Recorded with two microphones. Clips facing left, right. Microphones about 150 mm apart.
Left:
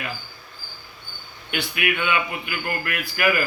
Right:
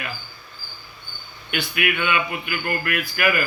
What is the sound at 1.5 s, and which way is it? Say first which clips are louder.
A man's voice: right 1 dB; 25° left (ahead or behind).